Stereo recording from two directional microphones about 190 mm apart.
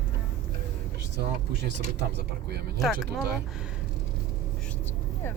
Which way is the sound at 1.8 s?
60° right (ahead or behind).